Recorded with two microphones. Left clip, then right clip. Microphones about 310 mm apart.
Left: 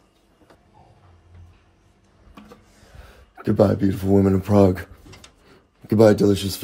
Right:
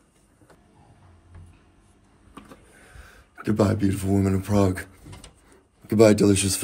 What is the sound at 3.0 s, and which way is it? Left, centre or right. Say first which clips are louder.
Speech: left 4 dB; centre.